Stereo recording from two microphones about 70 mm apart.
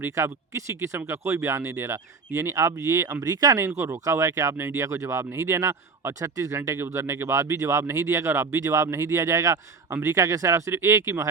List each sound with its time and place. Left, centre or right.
0.0 s speech: right
3.6 s speech: right
6.7 s speech: right
7.1 s speech: right